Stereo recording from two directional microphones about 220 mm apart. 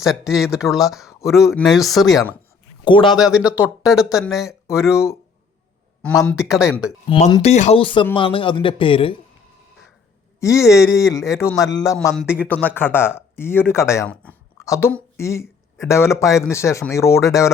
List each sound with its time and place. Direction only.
0.0 s speech: centre (ahead or behind)
2.8 s speech: 20° left (ahead or behind)
3.2 s speech: 5° right (ahead or behind)
6.0 s speech: 5° left (ahead or behind)
6.4 s speech: 5° right (ahead or behind)
7.1 s speech: 20° left (ahead or behind)
10.4 s speech: 15° left (ahead or behind)